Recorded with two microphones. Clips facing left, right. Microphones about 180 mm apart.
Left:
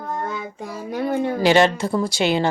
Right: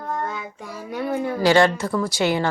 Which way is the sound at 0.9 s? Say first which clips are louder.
Left 2 dB; 30° left (ahead or behind).